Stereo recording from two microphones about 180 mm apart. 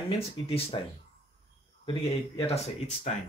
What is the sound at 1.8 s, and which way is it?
Speech, 30° left (ahead or behind).